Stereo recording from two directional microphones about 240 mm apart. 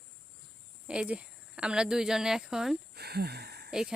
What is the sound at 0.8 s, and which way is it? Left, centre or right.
Speech, centre.